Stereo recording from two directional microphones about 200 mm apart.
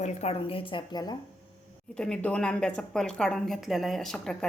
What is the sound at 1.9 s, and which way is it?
A woman's voice, 5° left (ahead or behind).